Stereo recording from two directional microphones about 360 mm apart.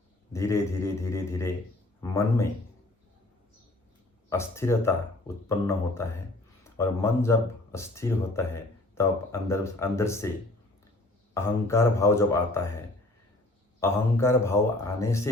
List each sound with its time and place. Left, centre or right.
0.3 s speech: centre
4.3 s speech: centre
11.3 s speech: centre